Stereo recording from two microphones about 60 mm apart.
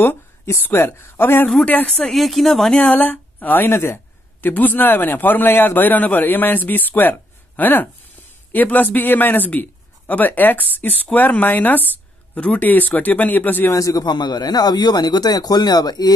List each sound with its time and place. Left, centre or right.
0.0 s speech: left
1.6 s speech: left
1.9 s speech: centre
2.7 s speech: left
13.7 s a man's voice: left
14.6 s speech: left